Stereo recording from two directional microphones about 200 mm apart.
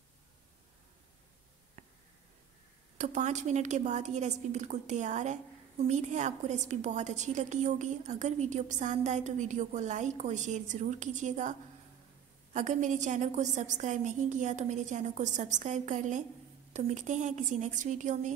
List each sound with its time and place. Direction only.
3.0 s a woman's voice: 35° right (ahead or behind)
12.5 s a woman's voice: 35° right (ahead or behind)